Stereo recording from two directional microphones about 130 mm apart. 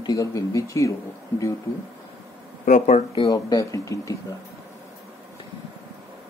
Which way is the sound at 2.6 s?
75° left (ahead or behind).